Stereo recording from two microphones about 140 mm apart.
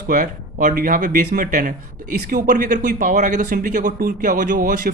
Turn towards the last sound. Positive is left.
turn(degrees=-75)  # may be behind; listen again after turning